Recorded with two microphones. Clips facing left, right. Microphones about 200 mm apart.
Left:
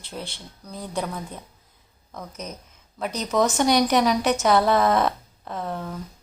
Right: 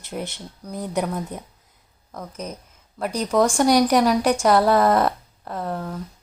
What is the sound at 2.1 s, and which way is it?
A woman's voice, 10° right (ahead or behind).